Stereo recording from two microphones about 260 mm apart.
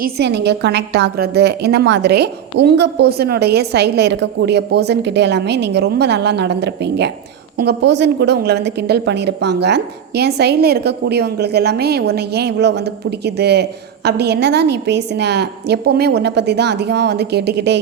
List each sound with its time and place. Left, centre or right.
0.0 s a woman's voice: right